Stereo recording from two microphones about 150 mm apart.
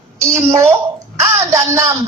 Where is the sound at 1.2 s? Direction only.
20° right (ahead or behind).